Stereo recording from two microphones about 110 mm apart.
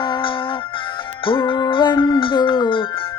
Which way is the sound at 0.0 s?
50° left (ahead or behind).